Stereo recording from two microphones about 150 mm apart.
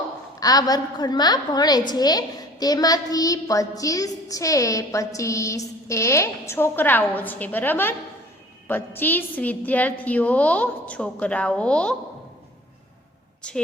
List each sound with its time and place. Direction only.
0.3 s a woman's voice: 25° left (ahead or behind); by 11.9 s 5° left (ahead or behind)
13.4 s a woman's voice: 5° left (ahead or behind)